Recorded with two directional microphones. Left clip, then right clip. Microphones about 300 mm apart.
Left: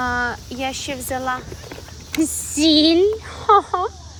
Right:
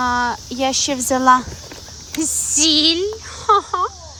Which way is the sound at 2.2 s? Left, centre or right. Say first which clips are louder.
Right 1 dB; centre.